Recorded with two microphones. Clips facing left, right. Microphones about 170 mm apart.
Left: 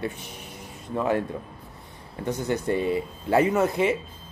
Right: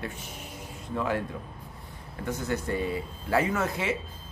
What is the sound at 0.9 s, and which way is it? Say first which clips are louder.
Speech: left 5 dB; 25° left (ahead or behind).